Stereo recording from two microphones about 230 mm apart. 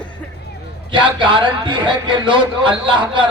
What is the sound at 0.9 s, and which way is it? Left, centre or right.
Speech, right.